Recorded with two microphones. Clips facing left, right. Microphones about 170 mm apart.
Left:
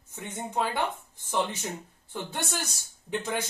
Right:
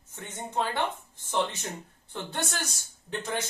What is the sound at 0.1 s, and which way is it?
Speech, 15° left (ahead or behind).